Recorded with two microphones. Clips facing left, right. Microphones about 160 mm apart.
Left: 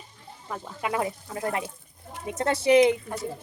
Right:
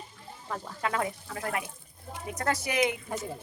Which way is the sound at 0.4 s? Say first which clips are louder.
Left 1 dB; 5° left (ahead or behind).